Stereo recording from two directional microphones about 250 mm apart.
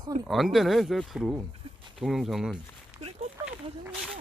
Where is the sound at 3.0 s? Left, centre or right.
Right.